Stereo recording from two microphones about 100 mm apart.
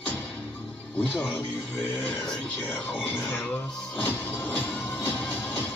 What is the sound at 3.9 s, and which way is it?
Music, 15° left (ahead or behind).